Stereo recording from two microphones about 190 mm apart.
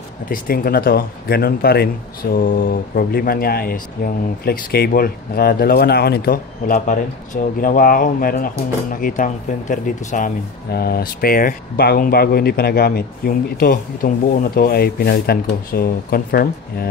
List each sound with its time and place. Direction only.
0.3 s speech: 50° left (ahead or behind)
2.3 s speech: 45° left (ahead or behind)